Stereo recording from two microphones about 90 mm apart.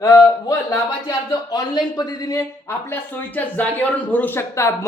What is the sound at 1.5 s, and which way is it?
Speech, 50° left (ahead or behind).